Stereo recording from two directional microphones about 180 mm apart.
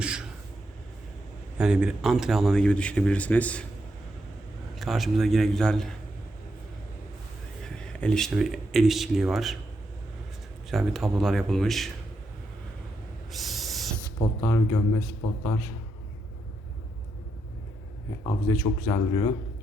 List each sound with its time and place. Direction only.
0.0 s vehicle: 5° right (ahead or behind)
1.5 s speech: 5° right (ahead or behind)
4.7 s speech: centre (ahead or behind)
7.8 s speech: 5° left (ahead or behind)
10.7 s speech: centre (ahead or behind)
13.3 s owl: centre (ahead or behind)
14.2 s speech: 15° left (ahead or behind)
18.2 s speech: 20° left (ahead or behind)